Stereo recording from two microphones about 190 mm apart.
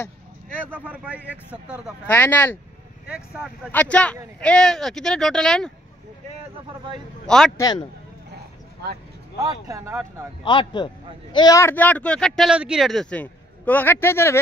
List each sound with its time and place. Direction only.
0.7 s speech: 10° right (ahead or behind)
2.0 s speech: 10° left (ahead or behind)
3.1 s speech: 5° right (ahead or behind)
3.7 s speech: 5° left (ahead or behind)
7.2 s speech: 5° left (ahead or behind)
7.5 s a man's voice: 20° left (ahead or behind)
9.4 s speech: 20° right (ahead or behind)
10.4 s a man's voice: 25° left (ahead or behind)